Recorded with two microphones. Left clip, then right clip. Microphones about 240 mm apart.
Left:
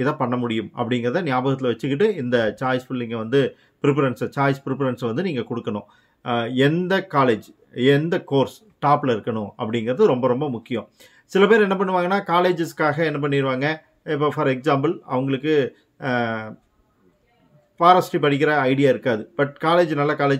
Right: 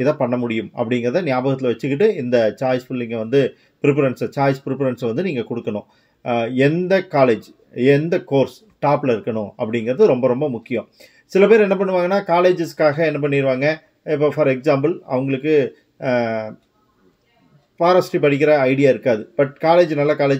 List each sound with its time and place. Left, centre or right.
0.0 s speech: centre
17.8 s speech: centre